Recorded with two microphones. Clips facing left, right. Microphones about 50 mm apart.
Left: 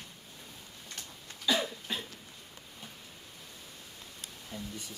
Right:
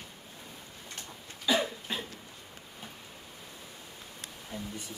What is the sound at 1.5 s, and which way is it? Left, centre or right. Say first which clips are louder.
Cough: right 2 dB; centre.